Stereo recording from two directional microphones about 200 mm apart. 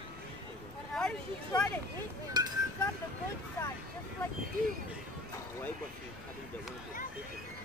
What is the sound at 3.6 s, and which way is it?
Speech, 15° left (ahead or behind).